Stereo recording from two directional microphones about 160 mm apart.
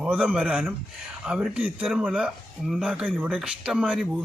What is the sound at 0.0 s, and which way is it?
Speech, 10° right (ahead or behind).